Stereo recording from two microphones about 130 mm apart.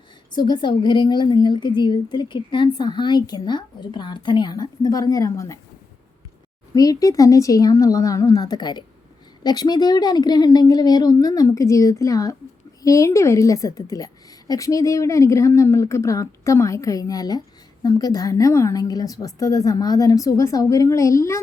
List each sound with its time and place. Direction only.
0.3 s a woman's voice: 35° left (ahead or behind)
6.7 s a woman's voice: 25° left (ahead or behind)